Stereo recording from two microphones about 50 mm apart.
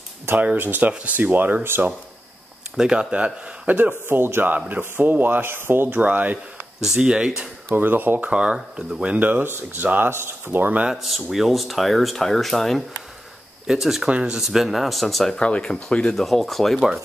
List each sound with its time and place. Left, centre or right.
0.6 s speech: right
2.8 s speech: centre
3.6 s speech: right
5.9 s speech: right
7.0 s speech: centre
7.7 s speech: right
8.2 s speech: centre
9.2 s speech: right
10.9 s speech: centre
13.7 s speech: centre
14.0 s speech: centre
15.3 s speech: left
16.2 s speech: centre